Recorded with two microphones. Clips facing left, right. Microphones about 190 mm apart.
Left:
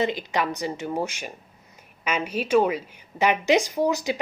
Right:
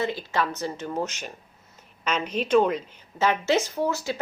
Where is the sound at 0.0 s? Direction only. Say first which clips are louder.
Left 2 dB; 20° left (ahead or behind).